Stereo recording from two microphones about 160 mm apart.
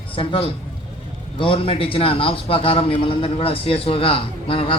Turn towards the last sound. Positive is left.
turn(degrees=35)  # may be behind; listen again after turning